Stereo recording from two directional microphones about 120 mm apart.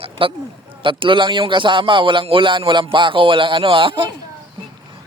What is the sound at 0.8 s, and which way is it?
Speech, 45° right (ahead or behind).